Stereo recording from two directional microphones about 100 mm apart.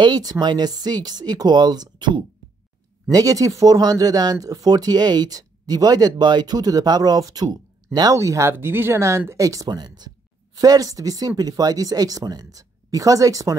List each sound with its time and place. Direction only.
0.0 s speech: 40° right (ahead or behind)
3.1 s speech: 35° right (ahead or behind)